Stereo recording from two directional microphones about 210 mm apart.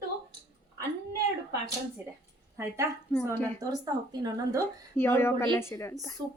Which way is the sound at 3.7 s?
20° right (ahead or behind).